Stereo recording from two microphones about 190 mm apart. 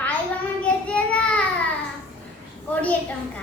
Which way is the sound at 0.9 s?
5° left (ahead or behind).